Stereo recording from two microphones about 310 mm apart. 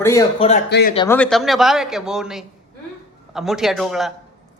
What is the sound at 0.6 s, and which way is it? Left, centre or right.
Speech, left.